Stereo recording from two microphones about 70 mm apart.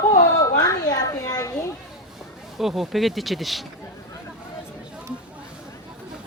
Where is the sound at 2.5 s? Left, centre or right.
Centre.